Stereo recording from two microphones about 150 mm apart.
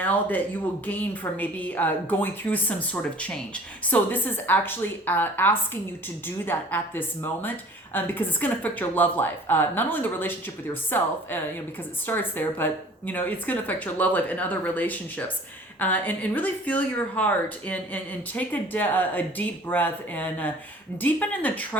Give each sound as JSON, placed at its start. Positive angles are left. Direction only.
{"t": 0.0, "sound": "speech", "side_deg": 10}